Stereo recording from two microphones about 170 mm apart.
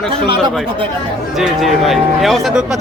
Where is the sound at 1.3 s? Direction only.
Centre (ahead or behind).